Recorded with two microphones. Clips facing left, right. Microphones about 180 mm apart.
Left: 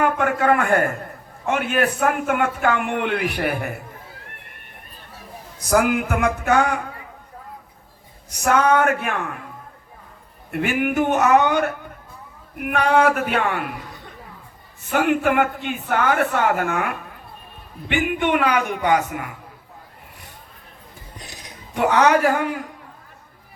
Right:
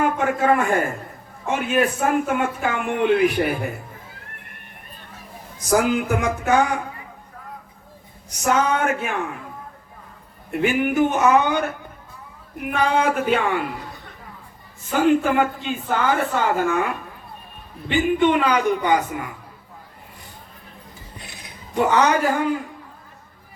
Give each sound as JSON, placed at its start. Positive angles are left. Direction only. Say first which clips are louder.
{"t": 0.0, "sound": "a sound", "louder": "left 1 dB", "side_deg": 60}
{"t": 1.5, "sound": "a man's voice", "louder": "even", "side_deg": 65}
{"t": 5.5, "sound": "a man's voice", "louder": "even", "side_deg": 60}
{"t": 8.3, "sound": "a man's voice", "louder": "left 2 dB", "side_deg": 60}
{"t": 10.6, "sound": "a man's voice", "louder": "right 2 dB", "side_deg": 60}
{"t": 12.7, "sound": "a man's voice", "louder": "left 2 dB", "side_deg": 65}
{"t": 14.9, "sound": "a man's voice", "louder": "right 1 dB", "side_deg": 65}
{"t": 21.8, "sound": "a man's voice", "louder": "left 1 dB", "side_deg": 65}